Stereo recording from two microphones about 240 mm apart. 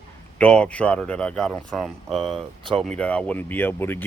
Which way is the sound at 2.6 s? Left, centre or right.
Right.